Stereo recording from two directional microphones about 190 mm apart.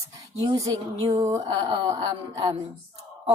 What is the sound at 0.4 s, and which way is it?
A woman's voice, 20° right (ahead or behind).